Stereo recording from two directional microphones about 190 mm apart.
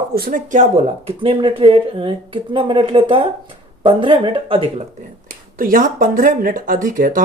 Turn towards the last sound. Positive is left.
turn(degrees=-45)  # may be behind; listen again after turning